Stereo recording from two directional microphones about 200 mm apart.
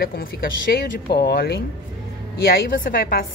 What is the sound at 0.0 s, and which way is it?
A woman's voice, 50° left (ahead or behind).